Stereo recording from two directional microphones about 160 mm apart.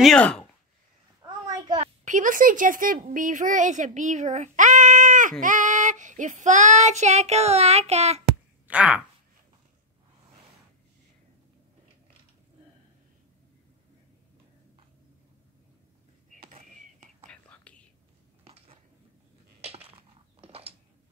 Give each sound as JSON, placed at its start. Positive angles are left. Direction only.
{"t": 0.0, "sound": "speech", "side_deg": 5}
{"t": 1.2, "sound": "a sound", "side_deg": -25}
{"t": 1.8, "sound": "speech", "side_deg": -50}
{"t": 5.4, "sound": "child singing", "side_deg": -55}
{"t": 8.6, "sound": "speech", "side_deg": -10}
{"t": 16.4, "sound": "whispering", "side_deg": -45}
{"t": 17.3, "sound": "whispering", "side_deg": 10}
{"t": 18.4, "sound": "a sound", "side_deg": -35}